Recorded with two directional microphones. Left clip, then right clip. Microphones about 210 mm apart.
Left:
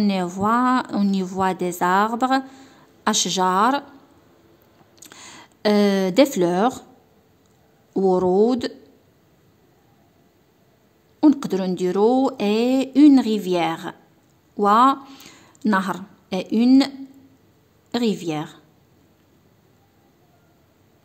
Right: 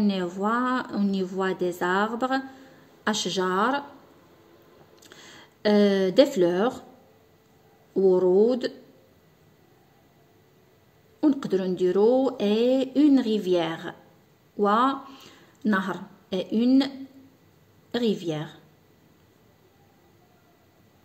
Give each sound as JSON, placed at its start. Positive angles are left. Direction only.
{"t": 0.0, "sound": "speech", "side_deg": 35}
{"t": 5.0, "sound": "speech", "side_deg": 40}
{"t": 7.9, "sound": "speech", "side_deg": 40}
{"t": 11.1, "sound": "speech", "side_deg": 40}
{"t": 17.9, "sound": "speech", "side_deg": 35}